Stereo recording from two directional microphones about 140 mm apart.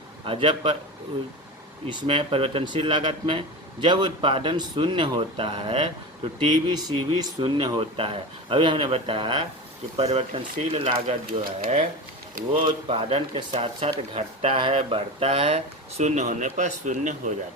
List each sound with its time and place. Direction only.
0.3 s speech: 40° right (ahead or behind)
1.9 s speech: 35° right (ahead or behind)
11.3 s speech: 90° right
12.6 s speech: 40° right (ahead or behind); by 17.3 s 65° right (ahead or behind)